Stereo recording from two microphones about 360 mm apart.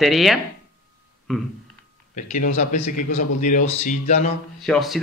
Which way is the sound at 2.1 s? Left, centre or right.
Left.